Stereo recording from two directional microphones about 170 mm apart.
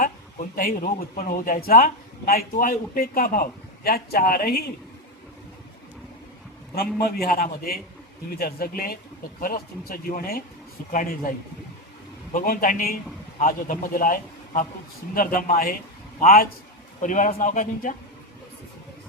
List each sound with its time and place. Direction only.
0.0 s speech: 55° left (ahead or behind); by 4.7 s 70° left (ahead or behind)
6.7 s speech: 65° left (ahead or behind)
12.3 s speech: 55° left (ahead or behind)
17.0 s speech: 50° left (ahead or behind)